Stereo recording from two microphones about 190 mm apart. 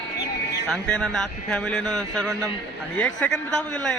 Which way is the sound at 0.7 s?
5° left (ahead or behind).